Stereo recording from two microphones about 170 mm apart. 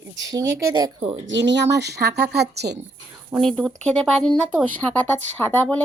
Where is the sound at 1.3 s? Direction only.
90° right; by 2.8 s 75° right (ahead or behind).